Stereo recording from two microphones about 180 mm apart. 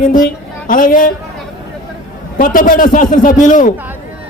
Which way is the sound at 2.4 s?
50° left (ahead or behind).